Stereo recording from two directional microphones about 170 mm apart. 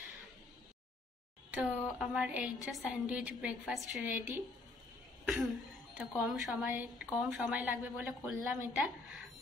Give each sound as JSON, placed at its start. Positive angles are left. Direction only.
{"t": 1.5, "sound": "a woman's voice", "side_deg": -5}
{"t": 5.2, "sound": "a woman's voice", "side_deg": 0}